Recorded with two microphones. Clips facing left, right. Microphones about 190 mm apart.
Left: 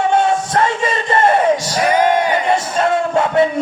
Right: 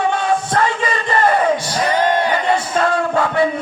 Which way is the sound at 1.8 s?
10° left (ahead or behind).